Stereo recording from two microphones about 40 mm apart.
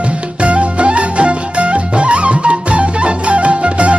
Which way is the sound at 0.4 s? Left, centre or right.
Right.